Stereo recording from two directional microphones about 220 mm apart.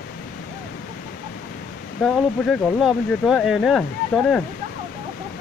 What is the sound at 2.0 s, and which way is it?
Speech, centre (ahead or behind).